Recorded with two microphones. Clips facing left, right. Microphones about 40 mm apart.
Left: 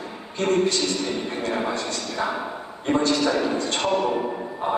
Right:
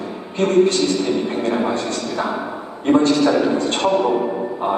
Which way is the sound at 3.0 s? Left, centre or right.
Right.